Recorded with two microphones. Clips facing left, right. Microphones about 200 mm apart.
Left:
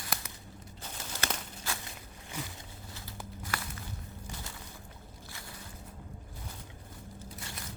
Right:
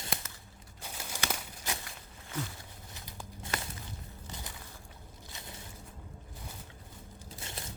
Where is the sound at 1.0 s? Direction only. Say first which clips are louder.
Even; 10° right (ahead or behind).